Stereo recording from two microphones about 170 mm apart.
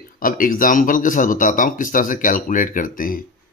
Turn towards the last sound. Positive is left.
turn(degrees=55)  # may be behind; listen again after turning